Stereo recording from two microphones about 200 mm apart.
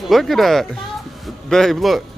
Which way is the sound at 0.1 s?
Centre (ahead or behind).